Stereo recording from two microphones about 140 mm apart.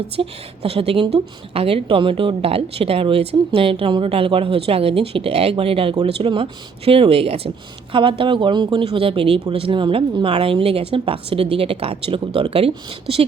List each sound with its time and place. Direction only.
0.2 s a woman's voice: 45° right (ahead or behind)